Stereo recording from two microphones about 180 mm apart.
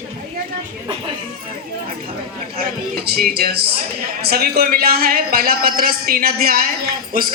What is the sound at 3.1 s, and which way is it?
A man's voice, 60° right (ahead or behind).